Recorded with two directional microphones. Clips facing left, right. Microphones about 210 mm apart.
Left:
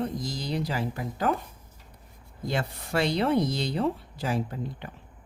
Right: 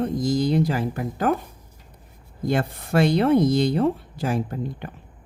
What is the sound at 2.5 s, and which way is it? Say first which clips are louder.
Speech: right 7 dB; 50° right (ahead or behind).